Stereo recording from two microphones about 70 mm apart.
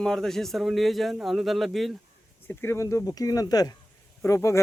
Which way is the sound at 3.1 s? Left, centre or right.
Left.